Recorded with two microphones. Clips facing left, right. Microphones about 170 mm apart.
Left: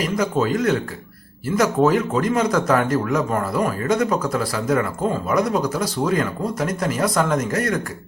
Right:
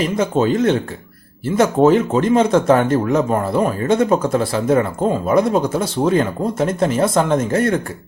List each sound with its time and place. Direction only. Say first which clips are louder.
0.0 s speech: right 4 dB; 25° right (ahead or behind)